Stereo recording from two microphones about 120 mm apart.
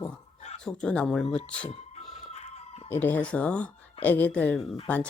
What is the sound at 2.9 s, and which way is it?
Speech, 15° left (ahead or behind).